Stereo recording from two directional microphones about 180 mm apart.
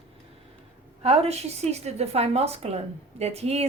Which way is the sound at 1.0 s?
35° right (ahead or behind).